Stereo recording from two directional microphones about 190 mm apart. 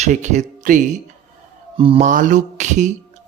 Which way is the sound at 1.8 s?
30° right (ahead or behind).